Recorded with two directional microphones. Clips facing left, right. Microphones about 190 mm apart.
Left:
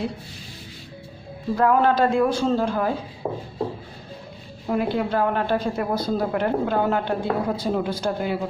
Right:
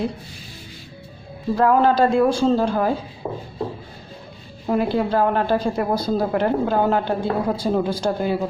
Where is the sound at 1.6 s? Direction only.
30° right (ahead or behind).